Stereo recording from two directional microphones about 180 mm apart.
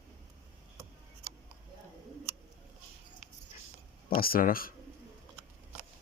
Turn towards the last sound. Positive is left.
turn(degrees=55)  # may be behind; listen again after turning